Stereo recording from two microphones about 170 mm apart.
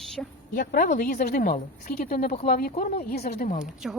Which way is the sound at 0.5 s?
55° left (ahead or behind).